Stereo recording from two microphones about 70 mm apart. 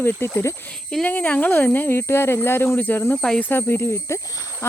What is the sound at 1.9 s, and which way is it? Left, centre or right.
Speech, left.